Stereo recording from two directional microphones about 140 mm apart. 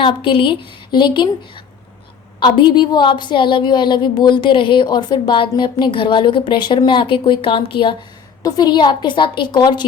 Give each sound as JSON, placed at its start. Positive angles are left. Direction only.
{"t": 0.0, "sound": "a woman's voice", "side_deg": 40}